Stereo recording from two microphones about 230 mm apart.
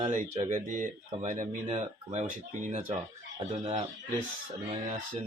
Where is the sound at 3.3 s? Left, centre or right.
Right.